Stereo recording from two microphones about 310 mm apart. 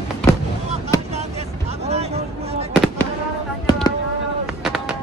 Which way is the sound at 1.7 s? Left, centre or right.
Centre.